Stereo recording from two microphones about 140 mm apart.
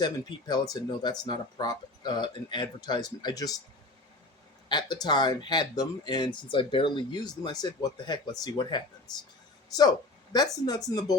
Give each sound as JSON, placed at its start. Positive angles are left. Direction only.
{"t": 0.0, "sound": "speech", "side_deg": 30}
{"t": 4.7, "sound": "speech", "side_deg": 30}
{"t": 10.3, "sound": "speech", "side_deg": 25}